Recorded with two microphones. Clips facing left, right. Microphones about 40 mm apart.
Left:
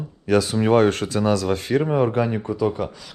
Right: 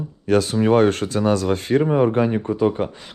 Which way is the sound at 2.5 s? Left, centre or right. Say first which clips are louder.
Right 3 dB; right.